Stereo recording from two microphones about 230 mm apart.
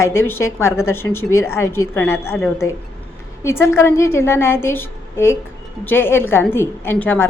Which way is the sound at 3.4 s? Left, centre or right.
Centre.